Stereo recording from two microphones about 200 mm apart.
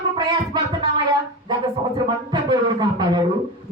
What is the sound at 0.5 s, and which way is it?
Music, 20° right (ahead or behind).